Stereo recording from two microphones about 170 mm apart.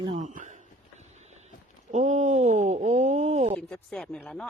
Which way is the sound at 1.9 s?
40° right (ahead or behind).